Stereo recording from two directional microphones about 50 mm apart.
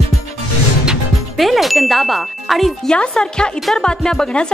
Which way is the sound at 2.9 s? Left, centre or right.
Centre.